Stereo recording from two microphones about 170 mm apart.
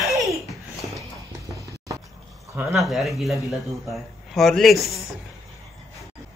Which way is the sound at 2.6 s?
Centre (ahead or behind).